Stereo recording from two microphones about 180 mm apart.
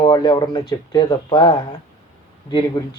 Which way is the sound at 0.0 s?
25° left (ahead or behind).